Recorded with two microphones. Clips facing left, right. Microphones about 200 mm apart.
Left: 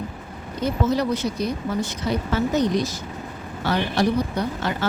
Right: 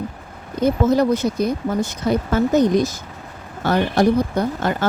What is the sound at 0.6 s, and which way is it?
Speech, 50° right (ahead or behind).